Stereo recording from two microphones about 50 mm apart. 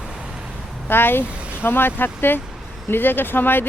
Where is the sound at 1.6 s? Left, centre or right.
Left.